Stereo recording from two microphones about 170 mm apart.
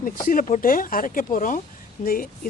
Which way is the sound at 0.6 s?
55° left (ahead or behind).